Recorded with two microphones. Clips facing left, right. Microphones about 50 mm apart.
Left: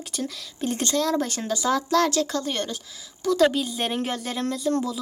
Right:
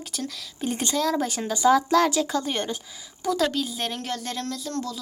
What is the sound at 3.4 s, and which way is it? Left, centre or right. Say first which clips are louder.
Speech: left 7 dB; centre.